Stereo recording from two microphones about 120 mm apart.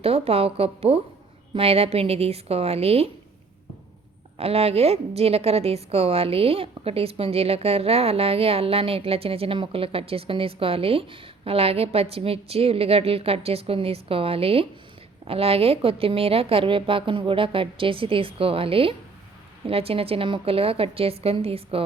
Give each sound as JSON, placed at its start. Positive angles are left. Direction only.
{"t": 0.0, "sound": "a woman's voice", "side_deg": -55}
{"t": 4.4, "sound": "a woman's voice", "side_deg": -55}